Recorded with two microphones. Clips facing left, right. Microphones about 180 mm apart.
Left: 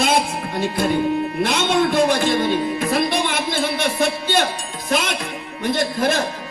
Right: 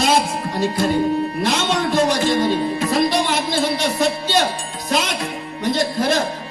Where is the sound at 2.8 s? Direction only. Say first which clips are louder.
Right 2 dB; 55° left (ahead or behind).